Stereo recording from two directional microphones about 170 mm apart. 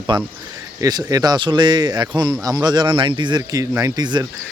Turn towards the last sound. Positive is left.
turn(degrees=-25)  # may be behind; listen again after turning